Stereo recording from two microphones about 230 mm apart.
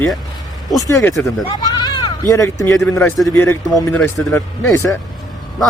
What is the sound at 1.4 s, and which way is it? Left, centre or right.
Bleat, centre.